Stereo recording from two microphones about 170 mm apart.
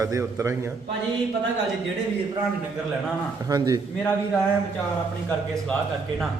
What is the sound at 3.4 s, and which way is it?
Speech, 20° right (ahead or behind).